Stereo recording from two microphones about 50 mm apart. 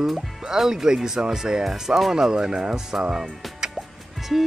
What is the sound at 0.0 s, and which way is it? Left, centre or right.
Humming, centre.